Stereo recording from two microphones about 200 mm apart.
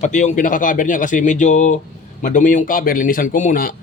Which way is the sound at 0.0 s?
40° left (ahead or behind).